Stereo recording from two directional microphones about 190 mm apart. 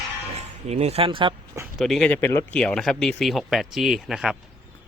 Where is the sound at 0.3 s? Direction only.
35° right (ahead or behind).